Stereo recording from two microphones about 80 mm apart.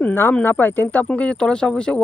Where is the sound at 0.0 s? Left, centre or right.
Left.